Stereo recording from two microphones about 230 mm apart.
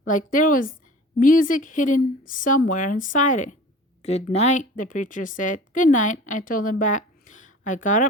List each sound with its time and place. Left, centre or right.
0.0 s a woman's voice: left